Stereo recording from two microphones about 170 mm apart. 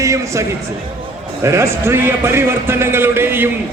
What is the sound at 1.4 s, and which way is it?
A man's voice, 15° right (ahead or behind).